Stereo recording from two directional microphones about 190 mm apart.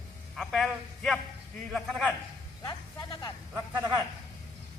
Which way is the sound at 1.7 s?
Centre (ahead or behind).